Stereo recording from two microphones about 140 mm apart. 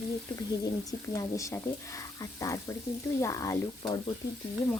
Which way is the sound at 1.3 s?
20° left (ahead or behind).